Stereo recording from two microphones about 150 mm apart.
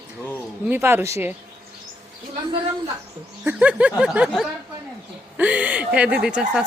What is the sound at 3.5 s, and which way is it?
A woman's voice, 10° right (ahead or behind).